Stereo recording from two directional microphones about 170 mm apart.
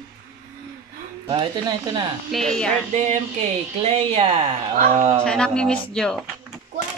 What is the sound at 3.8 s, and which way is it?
Speech, 35° right (ahead or behind).